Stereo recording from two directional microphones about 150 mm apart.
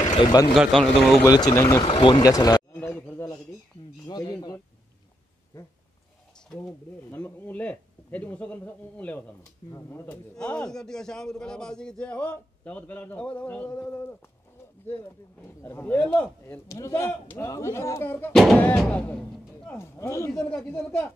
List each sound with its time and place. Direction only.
0.2 s speech: 30° left (ahead or behind)
0.6 s speech: centre (ahead or behind)
1.2 s speech: 25° left (ahead or behind)
1.9 s speech: 35° left (ahead or behind)
2.9 s a sound: 10° left (ahead or behind)
4.0 s speech: 25° left (ahead or behind)
7.1 s a man's voice: 15° left (ahead or behind)
15.6 s a man's voice: 15° left (ahead or behind)
18.3 s a man's voice: centre (ahead or behind)
19.8 s speech: 20° left (ahead or behind)
20.3 s a man's voice: 5° left (ahead or behind)